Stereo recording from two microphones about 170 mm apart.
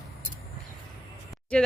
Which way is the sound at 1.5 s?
5° left (ahead or behind).